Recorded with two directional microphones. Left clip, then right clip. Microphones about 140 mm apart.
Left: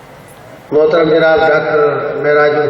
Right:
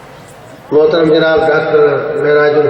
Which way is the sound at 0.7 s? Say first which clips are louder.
Right 1 dB; 40° right (ahead or behind).